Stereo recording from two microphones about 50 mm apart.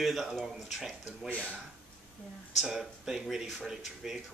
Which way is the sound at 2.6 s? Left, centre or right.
Centre.